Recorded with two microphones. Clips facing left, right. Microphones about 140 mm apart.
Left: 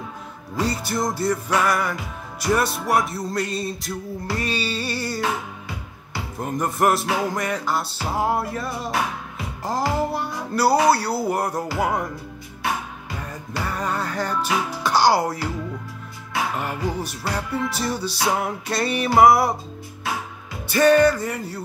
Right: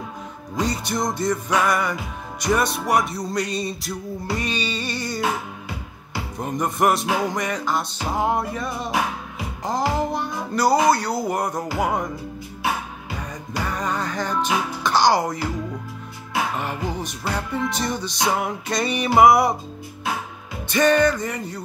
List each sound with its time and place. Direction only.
0.6 s music: 5° left (ahead or behind)
6.3 s music: 5° left (ahead or behind)
13.7 s music: 10° left (ahead or behind)
16.5 s music: 10° left (ahead or behind)
20.6 s music: 5° left (ahead or behind)